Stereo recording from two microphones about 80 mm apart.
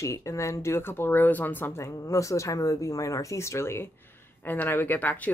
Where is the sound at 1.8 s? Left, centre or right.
Left.